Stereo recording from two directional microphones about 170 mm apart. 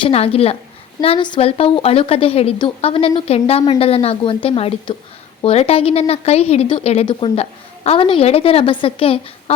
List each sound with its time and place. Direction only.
0.0 s a woman's voice: 35° left (ahead or behind)